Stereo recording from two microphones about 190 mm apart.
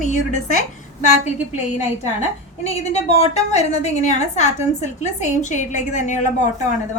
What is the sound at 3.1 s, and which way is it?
A woman's voice, 35° left (ahead or behind).